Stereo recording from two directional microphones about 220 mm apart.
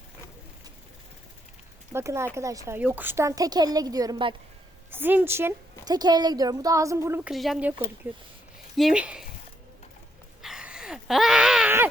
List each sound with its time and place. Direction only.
1.9 s a woman's voice: 10° right (ahead or behind)
4.9 s a woman's voice: 10° right (ahead or behind)
7.3 s speech: centre (ahead or behind)
8.7 s speech: centre (ahead or behind)
10.4 s a sound: 5° right (ahead or behind)